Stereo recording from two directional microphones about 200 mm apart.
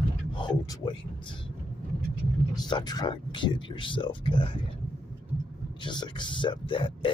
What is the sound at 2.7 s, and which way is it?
Speech, 20° left (ahead or behind).